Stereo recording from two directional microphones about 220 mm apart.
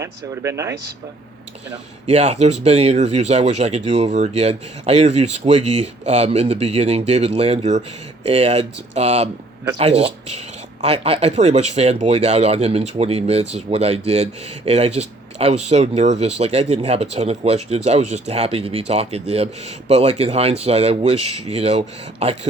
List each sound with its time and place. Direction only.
0.0 s speech: 15° right (ahead or behind)
2.0 s speech: 30° right (ahead or behind)